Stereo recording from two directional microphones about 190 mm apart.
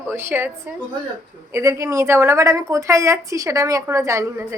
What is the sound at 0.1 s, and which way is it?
Speech, 10° right (ahead or behind).